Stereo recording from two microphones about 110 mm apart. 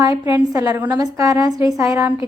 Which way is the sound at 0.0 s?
35° right (ahead or behind).